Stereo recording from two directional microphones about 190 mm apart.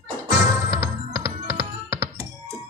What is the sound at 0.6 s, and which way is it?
Music, 15° right (ahead or behind).